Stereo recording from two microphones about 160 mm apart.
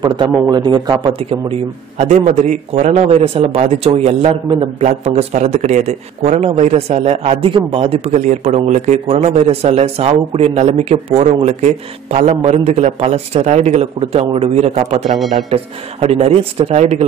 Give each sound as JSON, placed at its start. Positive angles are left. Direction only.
{"t": 0.0, "sound": "a man's voice", "side_deg": -25}
{"t": 1.3, "sound": "a man's voice", "side_deg": -40}
{"t": 4.8, "sound": "a man's voice", "side_deg": -45}